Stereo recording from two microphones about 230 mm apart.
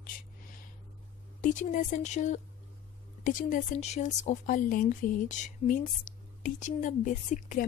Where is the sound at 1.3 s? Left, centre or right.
Left.